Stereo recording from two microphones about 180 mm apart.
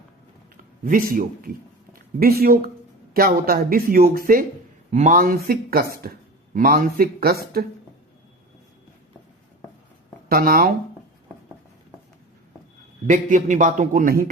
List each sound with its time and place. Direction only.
0.5 s speech: 50° right (ahead or behind)
4.9 s a man's voice: 45° right (ahead or behind)
10.2 s speech: 55° right (ahead or behind)
13.1 s a man's voice: 45° right (ahead or behind)